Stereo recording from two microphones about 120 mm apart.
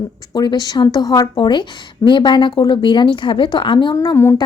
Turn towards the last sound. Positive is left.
turn(degrees=25)  # may be behind; listen again after turning